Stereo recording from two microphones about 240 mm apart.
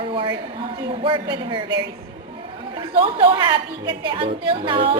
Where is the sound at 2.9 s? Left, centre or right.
Right.